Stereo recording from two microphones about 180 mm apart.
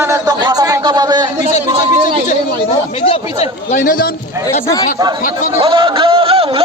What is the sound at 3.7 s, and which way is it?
Speech, 50° left (ahead or behind).